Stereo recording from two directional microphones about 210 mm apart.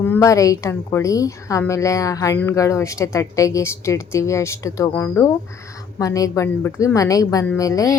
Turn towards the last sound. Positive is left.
turn(degrees=15)  # may be behind; listen again after turning